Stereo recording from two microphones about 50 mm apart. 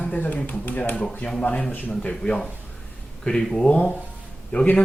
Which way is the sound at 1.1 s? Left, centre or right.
Centre.